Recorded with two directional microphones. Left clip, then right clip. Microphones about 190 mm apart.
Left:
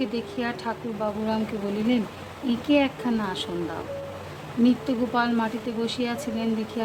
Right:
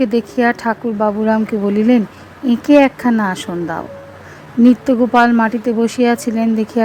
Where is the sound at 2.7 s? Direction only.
45° right (ahead or behind).